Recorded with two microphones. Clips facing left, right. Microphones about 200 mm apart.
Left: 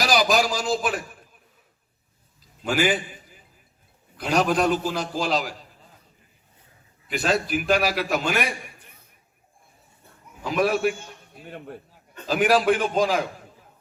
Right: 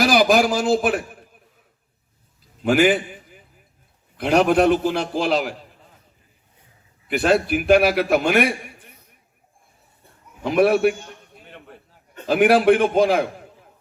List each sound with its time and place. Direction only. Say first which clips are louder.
0.0 s a man's voice: right 5 dB; 55° right (ahead or behind)
2.6 s a man's voice: right 6 dB; 50° right (ahead or behind)
7.1 s a man's voice: right 5 dB; 55° right (ahead or behind)
10.4 s a man's voice: right 6 dB; 55° right (ahead or behind)
12.2 s a man's voice: right 5 dB; 55° right (ahead or behind)